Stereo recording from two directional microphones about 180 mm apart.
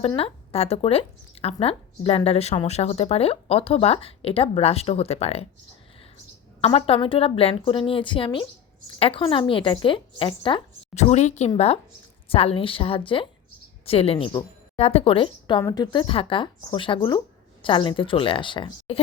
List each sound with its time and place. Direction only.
0.2 s speech: 35° left (ahead or behind)
6.7 s speech: 30° left (ahead or behind)